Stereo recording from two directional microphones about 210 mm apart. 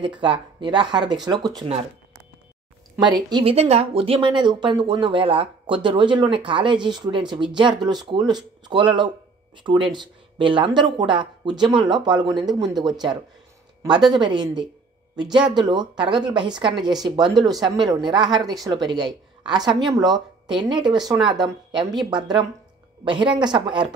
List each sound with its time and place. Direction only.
0.0 s speech: 25° right (ahead or behind)
3.3 s speech: 25° right (ahead or behind)